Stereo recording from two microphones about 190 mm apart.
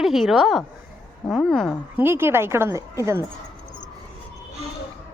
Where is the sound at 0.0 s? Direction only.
Centre (ahead or behind).